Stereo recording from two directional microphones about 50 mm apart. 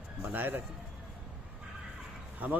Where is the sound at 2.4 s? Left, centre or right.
Right.